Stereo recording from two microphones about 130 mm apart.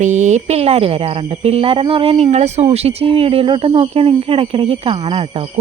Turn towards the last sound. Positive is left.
turn(degrees=-45)  # may be behind; listen again after turning